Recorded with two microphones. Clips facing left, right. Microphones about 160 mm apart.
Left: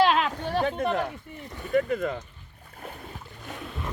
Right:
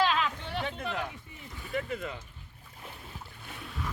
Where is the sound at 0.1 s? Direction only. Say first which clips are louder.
Left 6 dB; 50° left (ahead or behind).